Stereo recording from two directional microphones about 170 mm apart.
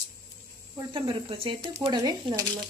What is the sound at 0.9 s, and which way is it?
Speech, 30° right (ahead or behind).